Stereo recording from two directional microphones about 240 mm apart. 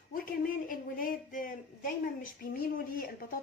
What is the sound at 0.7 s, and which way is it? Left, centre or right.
A woman's voice, left.